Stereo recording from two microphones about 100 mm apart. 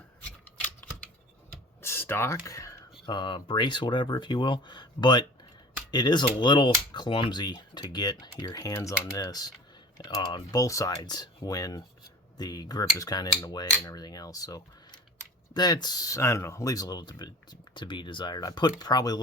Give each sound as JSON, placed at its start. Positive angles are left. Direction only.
{"t": 0.6, "sound": "typewriter", "side_deg": 15}
{"t": 1.8, "sound": "speech", "side_deg": 25}
{"t": 3.1, "sound": "speech", "side_deg": 55}